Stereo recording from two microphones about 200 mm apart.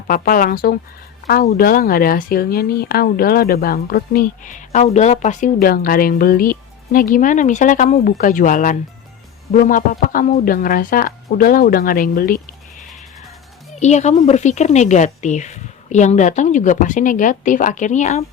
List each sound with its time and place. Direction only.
0.1 s speech: 45° left (ahead or behind)
13.7 s speech: 35° left (ahead or behind)